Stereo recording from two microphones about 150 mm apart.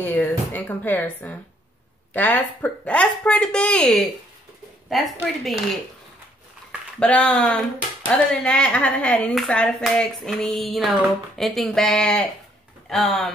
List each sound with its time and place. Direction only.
0.0 s speech: 10° left (ahead or behind)
4.8 s clapping: centre (ahead or behind)
7.0 s speech: 5° left (ahead or behind)
9.3 s clapping: 5° left (ahead or behind)